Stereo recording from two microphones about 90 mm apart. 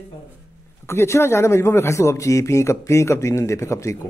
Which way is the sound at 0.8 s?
30° left (ahead or behind).